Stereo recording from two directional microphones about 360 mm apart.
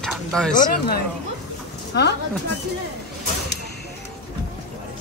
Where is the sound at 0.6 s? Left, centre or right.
Left.